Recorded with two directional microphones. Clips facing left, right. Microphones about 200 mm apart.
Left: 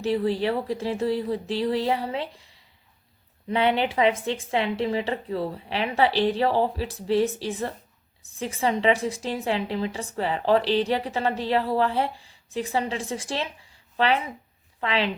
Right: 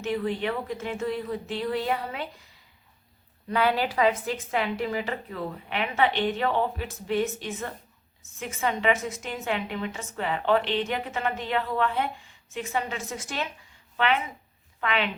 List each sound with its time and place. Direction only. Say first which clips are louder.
0.0 s a woman's voice: left 4 dB; 35° left (ahead or behind)